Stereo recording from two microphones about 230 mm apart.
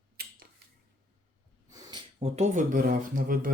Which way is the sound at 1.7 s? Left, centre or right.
Centre.